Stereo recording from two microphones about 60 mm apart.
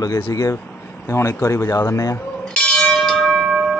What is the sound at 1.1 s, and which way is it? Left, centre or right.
Speech, left.